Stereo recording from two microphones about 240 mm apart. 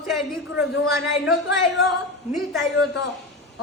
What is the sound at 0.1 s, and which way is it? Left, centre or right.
A man's voice, centre.